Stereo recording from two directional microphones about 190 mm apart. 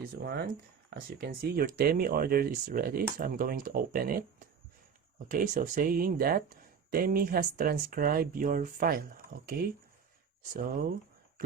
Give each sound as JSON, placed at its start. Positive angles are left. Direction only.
{"t": 0.2, "sound": "speech", "side_deg": -55}
{"t": 5.3, "sound": "speech", "side_deg": -45}